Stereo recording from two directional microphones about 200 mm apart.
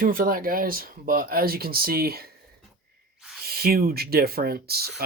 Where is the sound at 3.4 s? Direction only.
50° right (ahead or behind).